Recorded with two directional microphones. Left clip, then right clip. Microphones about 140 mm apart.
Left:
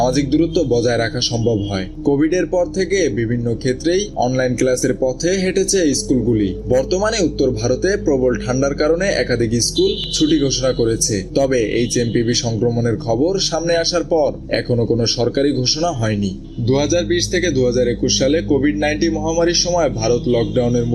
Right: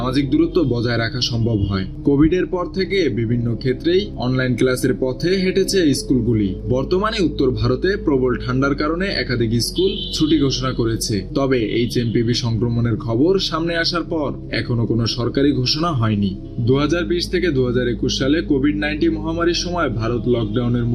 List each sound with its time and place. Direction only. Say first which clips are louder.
0.0 s speech: left 2 dB; 30° right (ahead or behind)